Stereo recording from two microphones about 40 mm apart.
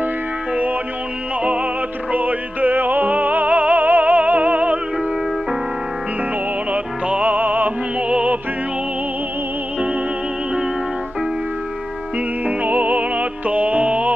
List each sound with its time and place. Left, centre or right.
1.4 s music: right
2.1 s music: right
6.7 s music: right
8.1 s music: right
12.4 s music: right